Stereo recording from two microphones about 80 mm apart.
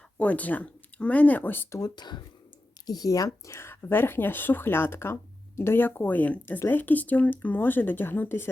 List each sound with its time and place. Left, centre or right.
0.2 s speech: centre
1.8 s speech: left
2.8 s speech: left